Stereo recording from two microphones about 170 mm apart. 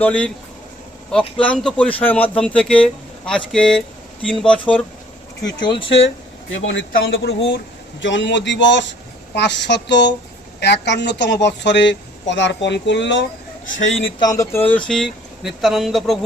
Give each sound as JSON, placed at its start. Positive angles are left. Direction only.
{"t": 0.0, "sound": "speech", "side_deg": 5}
{"t": 1.4, "sound": "speech", "side_deg": 5}
{"t": 5.5, "sound": "speech", "side_deg": 25}
{"t": 6.7, "sound": "a woman's voice", "side_deg": 85}
{"t": 13.7, "sound": "a man's voice", "side_deg": 45}
{"t": 14.2, "sound": "speech", "side_deg": 20}